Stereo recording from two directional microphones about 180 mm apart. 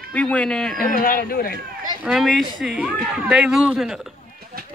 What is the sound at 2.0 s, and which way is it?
A man's voice, centre (ahead or behind).